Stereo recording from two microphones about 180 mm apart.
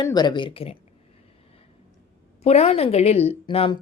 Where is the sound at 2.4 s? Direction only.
35° left (ahead or behind).